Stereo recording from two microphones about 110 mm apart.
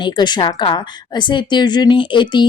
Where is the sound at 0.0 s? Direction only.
45° left (ahead or behind).